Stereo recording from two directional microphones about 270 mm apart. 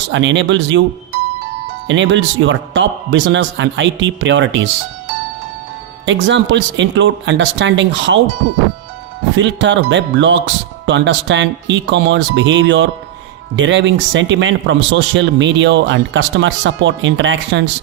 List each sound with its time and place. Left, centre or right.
0.1 s a man's voice: right
1.9 s a man's voice: right
6.1 s a man's voice: right
9.4 s a man's voice: right